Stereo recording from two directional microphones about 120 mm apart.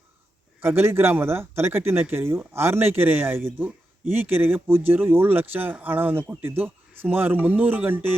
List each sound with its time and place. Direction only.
0.6 s speech: 20° right (ahead or behind)